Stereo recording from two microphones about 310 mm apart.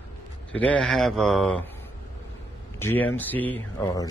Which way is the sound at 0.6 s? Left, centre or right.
Centre.